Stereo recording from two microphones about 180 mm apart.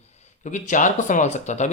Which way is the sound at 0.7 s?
45° left (ahead or behind).